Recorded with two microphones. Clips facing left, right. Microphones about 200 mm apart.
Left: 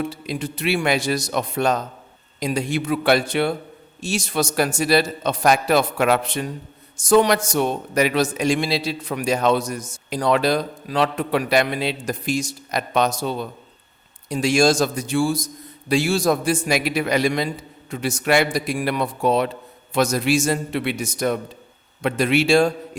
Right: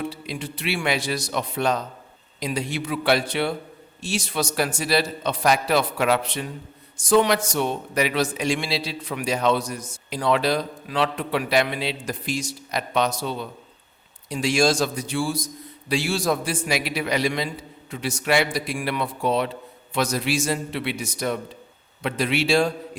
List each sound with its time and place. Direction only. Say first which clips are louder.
0.1 s a man's voice: left 4 dB; 45° left (ahead or behind)